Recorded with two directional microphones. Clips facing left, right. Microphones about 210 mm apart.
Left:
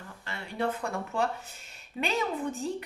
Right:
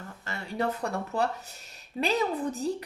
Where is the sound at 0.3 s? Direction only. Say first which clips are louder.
Right 1 dB; 40° right (ahead or behind).